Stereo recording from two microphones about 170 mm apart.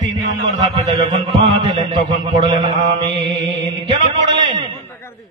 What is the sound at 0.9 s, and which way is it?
A man's voice, 30° right (ahead or behind).